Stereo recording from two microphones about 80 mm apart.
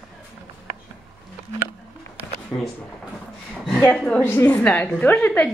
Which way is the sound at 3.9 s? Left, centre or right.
Centre.